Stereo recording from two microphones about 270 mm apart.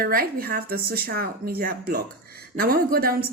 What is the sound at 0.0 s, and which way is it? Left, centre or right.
A woman's voice, right.